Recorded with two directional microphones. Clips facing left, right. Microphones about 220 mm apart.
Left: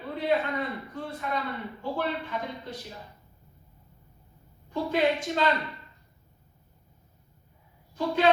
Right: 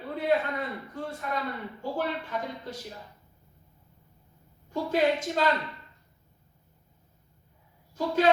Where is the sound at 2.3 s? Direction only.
45° right (ahead or behind).